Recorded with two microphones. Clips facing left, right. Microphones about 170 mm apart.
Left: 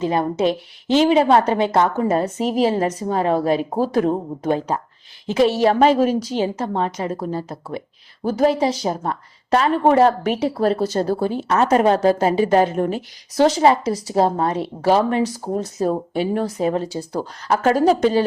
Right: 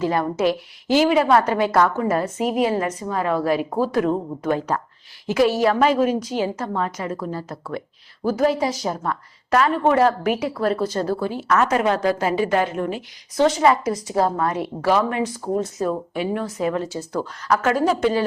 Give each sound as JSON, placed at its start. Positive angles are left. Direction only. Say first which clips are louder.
{"t": 0.0, "sound": "a woman's voice", "louder": "left 1 dB", "side_deg": 20}